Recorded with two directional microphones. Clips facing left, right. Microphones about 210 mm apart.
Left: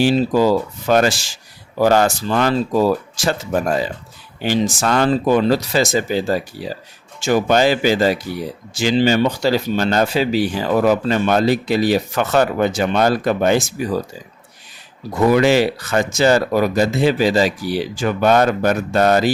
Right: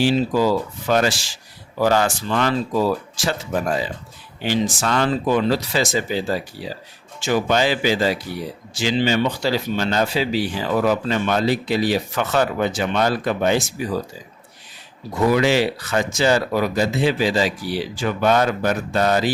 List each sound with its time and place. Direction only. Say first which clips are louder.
0.0 s speech: left 3 dB; 45° left (ahead or behind)
15.3 s speech: left 4 dB; 50° left (ahead or behind)